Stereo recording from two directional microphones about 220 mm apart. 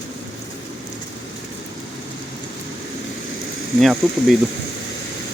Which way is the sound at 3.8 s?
Centre (ahead or behind).